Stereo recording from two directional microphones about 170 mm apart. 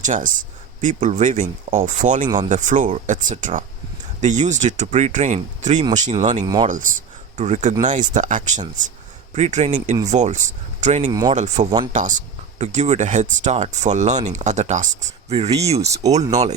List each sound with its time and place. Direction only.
0.0 s speech: 50° right (ahead or behind)
2.2 s speech: 25° right (ahead or behind)
2.5 s speech: 45° right (ahead or behind)
11.1 s speech: 20° right (ahead or behind)
11.3 s speech: 45° right (ahead or behind)
15.8 s speech: 20° right (ahead or behind)